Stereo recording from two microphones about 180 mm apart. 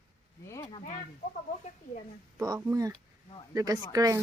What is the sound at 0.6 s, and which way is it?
Speech, 35° left (ahead or behind).